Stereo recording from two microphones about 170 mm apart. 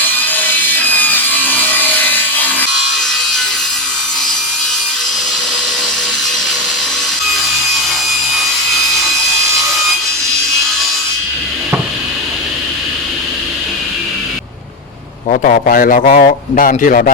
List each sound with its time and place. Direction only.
0.3 s wood: 10° left (ahead or behind)
15.3 s a man's voice: 55° left (ahead or behind)